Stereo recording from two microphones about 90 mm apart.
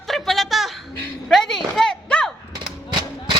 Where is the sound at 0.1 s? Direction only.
Centre (ahead or behind).